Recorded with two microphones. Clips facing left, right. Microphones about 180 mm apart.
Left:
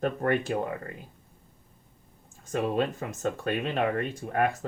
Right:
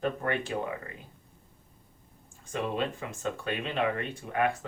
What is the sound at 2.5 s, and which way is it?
Speech, 45° left (ahead or behind).